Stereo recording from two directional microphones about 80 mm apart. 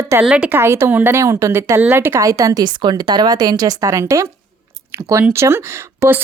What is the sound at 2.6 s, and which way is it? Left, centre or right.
Speech, right.